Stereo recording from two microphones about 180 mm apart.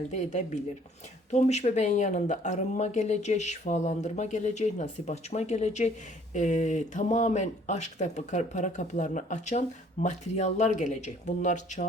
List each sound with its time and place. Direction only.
0.1 s speech: 40° left (ahead or behind)